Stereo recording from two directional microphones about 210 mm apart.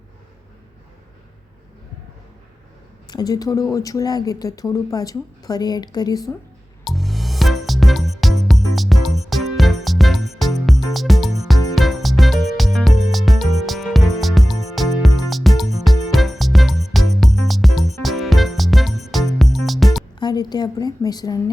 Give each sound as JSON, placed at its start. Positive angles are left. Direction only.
{"t": 3.1, "sound": "a woman's voice", "side_deg": 20}
{"t": 6.8, "sound": "music", "side_deg": 0}
{"t": 20.1, "sound": "a woman's voice", "side_deg": 20}